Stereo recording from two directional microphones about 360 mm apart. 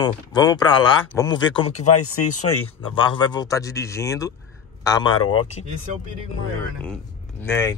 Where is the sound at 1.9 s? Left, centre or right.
Left.